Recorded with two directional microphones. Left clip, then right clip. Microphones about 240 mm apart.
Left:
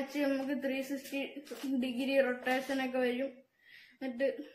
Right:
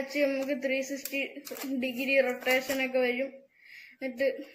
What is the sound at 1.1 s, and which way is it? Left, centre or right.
Speech, left.